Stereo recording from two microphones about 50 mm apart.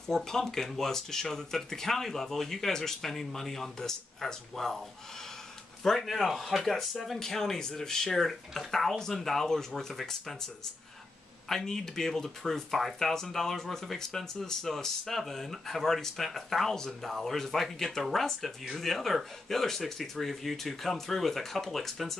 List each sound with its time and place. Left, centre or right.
0.0 s speech: centre
5.9 s speech: centre